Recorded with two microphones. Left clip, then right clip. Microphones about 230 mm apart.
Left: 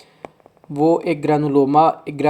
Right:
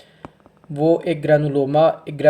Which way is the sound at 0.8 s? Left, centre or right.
Left.